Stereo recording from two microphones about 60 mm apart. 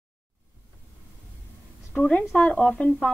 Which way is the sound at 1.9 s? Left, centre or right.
Left.